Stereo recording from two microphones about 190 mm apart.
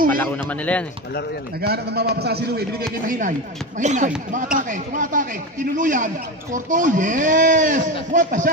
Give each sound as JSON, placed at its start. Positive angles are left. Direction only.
{"t": 0.5, "sound": "speech", "side_deg": 5}
{"t": 1.6, "sound": "a man's voice", "side_deg": -60}
{"t": 3.1, "sound": "speech", "side_deg": -40}